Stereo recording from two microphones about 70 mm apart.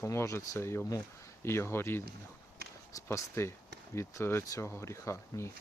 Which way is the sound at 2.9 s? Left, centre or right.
Left.